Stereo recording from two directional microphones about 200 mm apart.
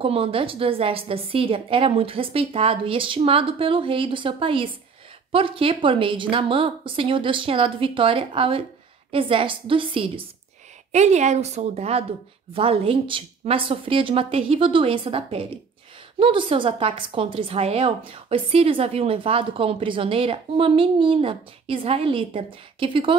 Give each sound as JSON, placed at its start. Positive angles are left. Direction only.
{"t": 0.0, "sound": "a woman's voice", "side_deg": -25}